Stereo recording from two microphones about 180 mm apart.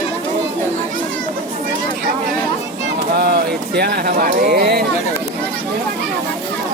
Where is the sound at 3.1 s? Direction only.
60° right (ahead or behind).